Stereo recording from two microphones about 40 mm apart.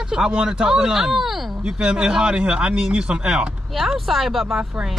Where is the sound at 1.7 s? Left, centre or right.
Right.